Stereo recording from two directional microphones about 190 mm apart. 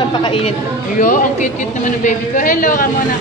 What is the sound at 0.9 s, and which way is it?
A woman's voice, 45° left (ahead or behind).